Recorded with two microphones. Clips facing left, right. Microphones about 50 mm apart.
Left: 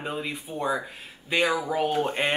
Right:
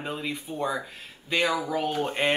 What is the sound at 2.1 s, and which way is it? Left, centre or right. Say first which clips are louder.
Speech: right 1 dB; centre.